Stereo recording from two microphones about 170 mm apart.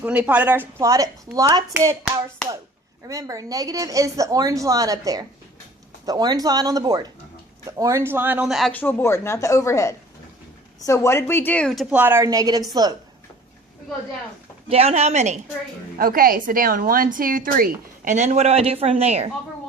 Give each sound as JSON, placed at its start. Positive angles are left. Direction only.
{"t": 0.0, "sound": "a woman's voice", "side_deg": -10}
{"t": 8.7, "sound": "speech", "side_deg": 10}
{"t": 11.9, "sound": "speech", "side_deg": -15}
{"t": 14.7, "sound": "speech", "side_deg": -35}
{"t": 16.0, "sound": "a woman's voice", "side_deg": -60}
{"t": 18.0, "sound": "speech", "side_deg": -45}